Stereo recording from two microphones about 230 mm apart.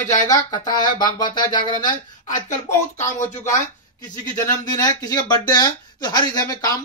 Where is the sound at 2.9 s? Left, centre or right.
Left.